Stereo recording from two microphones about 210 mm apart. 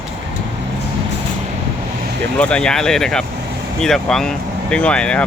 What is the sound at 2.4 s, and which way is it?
Speech, 5° left (ahead or behind).